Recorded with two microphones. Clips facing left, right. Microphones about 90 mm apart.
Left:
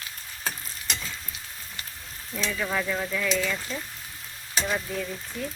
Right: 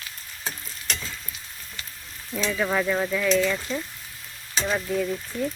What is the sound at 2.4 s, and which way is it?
Cutlery, 20° right (ahead or behind).